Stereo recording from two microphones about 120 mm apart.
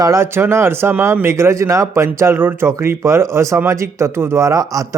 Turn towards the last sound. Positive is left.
turn(degrees=-30)  # may be behind; listen again after turning